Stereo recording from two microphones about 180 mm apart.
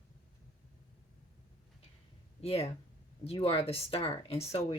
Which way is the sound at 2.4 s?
35° left (ahead or behind).